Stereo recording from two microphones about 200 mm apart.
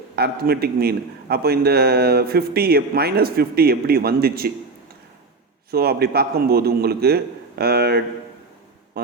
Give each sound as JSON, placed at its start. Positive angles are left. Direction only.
{"t": 0.2, "sound": "a man's voice", "side_deg": -50}
{"t": 5.7, "sound": "a man's voice", "side_deg": -50}